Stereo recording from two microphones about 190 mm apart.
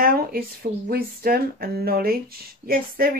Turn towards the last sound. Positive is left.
turn(degrees=-50)  # may be behind; listen again after turning